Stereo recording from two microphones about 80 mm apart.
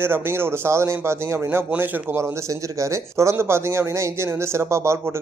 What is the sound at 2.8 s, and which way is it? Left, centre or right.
A man's voice, right.